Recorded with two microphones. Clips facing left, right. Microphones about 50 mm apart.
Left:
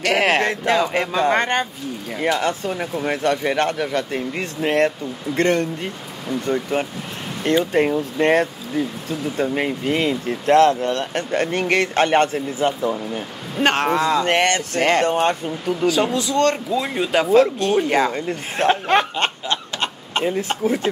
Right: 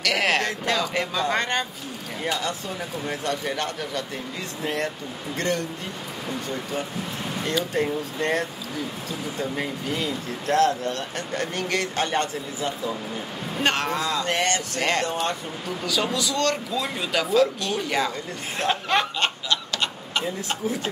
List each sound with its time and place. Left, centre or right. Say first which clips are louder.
0.0 s speech: left 5 dB; left